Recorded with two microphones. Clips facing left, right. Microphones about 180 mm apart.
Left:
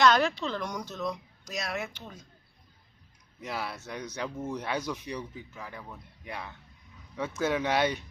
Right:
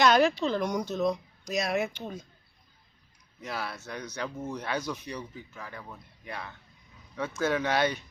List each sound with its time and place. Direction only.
0.0 s speech: 10° right (ahead or behind)
3.4 s speech: 20° left (ahead or behind)